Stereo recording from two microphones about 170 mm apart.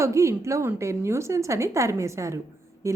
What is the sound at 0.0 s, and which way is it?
A woman's voice, 15° right (ahead or behind).